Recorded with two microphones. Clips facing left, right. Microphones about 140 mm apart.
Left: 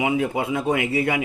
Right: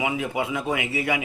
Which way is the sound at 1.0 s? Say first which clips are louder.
Left 3 dB; 35° left (ahead or behind).